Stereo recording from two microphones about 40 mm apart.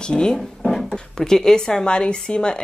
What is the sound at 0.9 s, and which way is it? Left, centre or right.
A woman's voice, centre.